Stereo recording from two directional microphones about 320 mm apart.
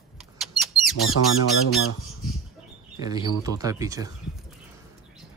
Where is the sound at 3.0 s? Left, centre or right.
Centre.